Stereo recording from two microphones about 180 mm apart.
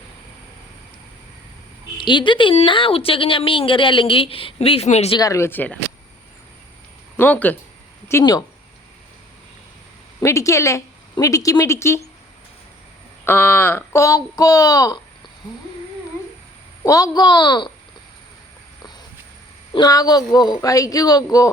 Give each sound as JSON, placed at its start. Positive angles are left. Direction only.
{"t": 2.0, "sound": "a woman's voice", "side_deg": 25}
{"t": 5.1, "sound": "speech", "side_deg": 20}
{"t": 7.2, "sound": "speech", "side_deg": 10}
{"t": 10.2, "sound": "a woman's voice", "side_deg": 15}
{"t": 13.2, "sound": "speech", "side_deg": 15}
{"t": 16.8, "sound": "a woman's voice", "side_deg": 20}
{"t": 19.7, "sound": "a woman's voice", "side_deg": 20}